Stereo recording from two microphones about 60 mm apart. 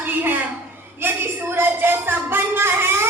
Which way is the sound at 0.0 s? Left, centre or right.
Right.